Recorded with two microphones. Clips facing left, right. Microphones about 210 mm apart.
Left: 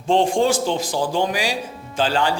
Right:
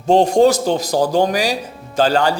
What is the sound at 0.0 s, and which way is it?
Speech, 40° right (ahead or behind).